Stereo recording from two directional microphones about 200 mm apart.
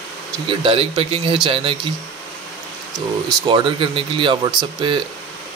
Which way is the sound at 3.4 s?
25° right (ahead or behind).